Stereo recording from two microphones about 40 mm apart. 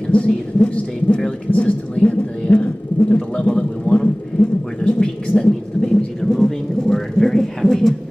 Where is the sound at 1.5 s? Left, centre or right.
Left; by 8.0 s centre.